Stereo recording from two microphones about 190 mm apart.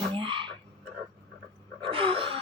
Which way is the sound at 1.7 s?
30° right (ahead or behind).